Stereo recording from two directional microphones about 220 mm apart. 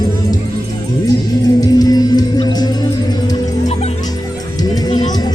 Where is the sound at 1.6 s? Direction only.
15° left (ahead or behind).